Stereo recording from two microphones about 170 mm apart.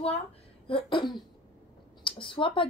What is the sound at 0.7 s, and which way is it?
Speech, 30° left (ahead or behind).